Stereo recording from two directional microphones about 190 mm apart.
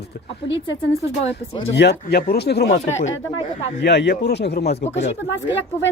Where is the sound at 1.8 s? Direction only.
60° left (ahead or behind).